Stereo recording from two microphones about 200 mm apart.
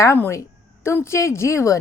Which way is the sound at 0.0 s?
15° left (ahead or behind).